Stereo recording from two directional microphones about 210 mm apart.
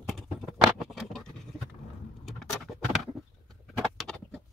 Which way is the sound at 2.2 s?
Centre (ahead or behind).